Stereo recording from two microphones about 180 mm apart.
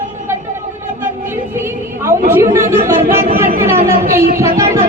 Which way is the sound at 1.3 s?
15° right (ahead or behind).